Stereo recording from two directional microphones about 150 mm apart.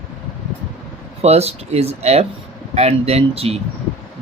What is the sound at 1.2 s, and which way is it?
Speech, 45° right (ahead or behind).